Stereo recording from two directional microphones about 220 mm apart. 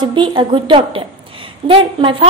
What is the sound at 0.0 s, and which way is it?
A woman's voice, 20° right (ahead or behind).